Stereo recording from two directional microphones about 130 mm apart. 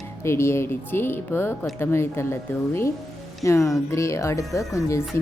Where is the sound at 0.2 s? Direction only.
20° left (ahead or behind).